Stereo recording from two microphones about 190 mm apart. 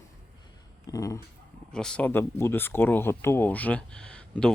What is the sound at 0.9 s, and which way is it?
Speech, 15° left (ahead or behind).